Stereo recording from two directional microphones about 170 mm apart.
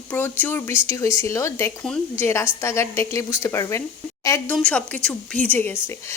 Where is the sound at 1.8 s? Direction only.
5° left (ahead or behind).